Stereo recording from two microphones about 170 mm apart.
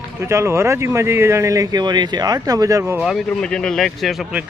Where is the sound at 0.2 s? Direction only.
15° right (ahead or behind).